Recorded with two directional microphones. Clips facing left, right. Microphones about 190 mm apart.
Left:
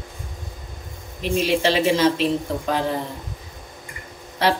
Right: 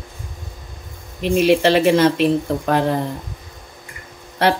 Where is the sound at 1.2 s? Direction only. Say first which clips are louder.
Right 6 dB; 60° right (ahead or behind).